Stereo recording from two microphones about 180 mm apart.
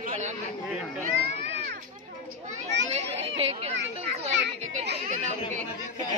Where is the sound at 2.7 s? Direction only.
80° right.